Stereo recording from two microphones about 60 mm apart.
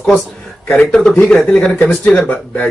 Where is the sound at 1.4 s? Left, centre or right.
Left.